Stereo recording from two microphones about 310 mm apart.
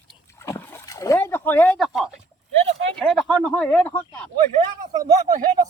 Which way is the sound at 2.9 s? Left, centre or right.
Centre.